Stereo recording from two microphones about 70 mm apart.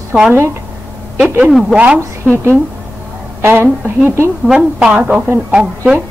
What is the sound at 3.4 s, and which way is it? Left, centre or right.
Speech, right.